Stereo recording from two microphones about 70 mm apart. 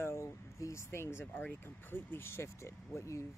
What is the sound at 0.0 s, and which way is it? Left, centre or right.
Speech, left.